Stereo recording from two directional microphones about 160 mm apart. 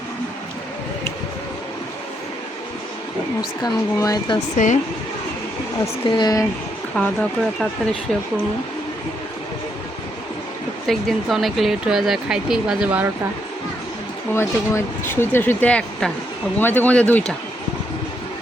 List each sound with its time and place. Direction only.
3.6 s speech: 25° left (ahead or behind)
4.5 s speech: 50° left (ahead or behind)
5.8 s speech: 25° left (ahead or behind)
6.9 s speech: 5° left (ahead or behind)
10.8 s speech: centre (ahead or behind)
14.3 s speech: 15° left (ahead or behind)